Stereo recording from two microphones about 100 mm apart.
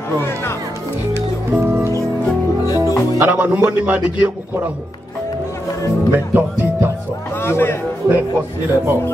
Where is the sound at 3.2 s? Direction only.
15° right (ahead or behind).